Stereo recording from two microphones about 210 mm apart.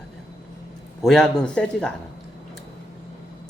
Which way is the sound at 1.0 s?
Centre (ahead or behind).